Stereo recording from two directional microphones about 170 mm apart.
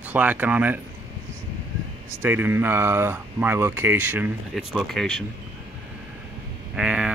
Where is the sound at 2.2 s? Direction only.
10° right (ahead or behind).